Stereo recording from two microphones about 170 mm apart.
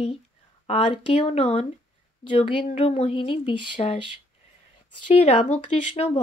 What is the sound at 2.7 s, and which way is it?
Speech, 35° left (ahead or behind).